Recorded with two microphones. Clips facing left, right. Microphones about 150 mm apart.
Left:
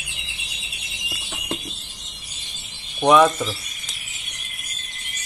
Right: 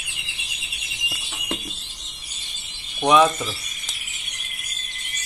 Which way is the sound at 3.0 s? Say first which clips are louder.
Left 2 dB; centre (ahead or behind).